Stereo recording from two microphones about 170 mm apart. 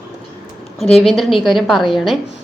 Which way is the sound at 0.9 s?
Centre (ahead or behind).